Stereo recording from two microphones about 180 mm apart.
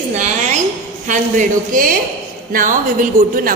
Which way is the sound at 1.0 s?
45° right (ahead or behind).